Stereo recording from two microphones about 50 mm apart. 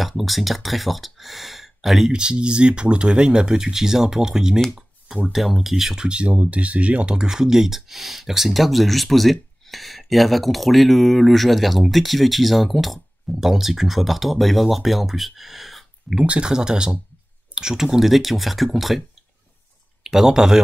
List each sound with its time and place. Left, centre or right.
0.2 s speech: centre
2.1 s speech: centre
4.6 s a sound: centre
5.3 s speech: centre
6.0 s speech: right
7.2 s speech: centre
16.3 s speech: right